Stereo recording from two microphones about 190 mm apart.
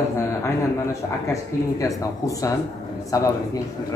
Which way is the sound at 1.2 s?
15° left (ahead or behind).